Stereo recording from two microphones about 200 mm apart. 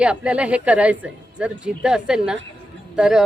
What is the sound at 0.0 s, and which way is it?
A woman's voice, 5° right (ahead or behind).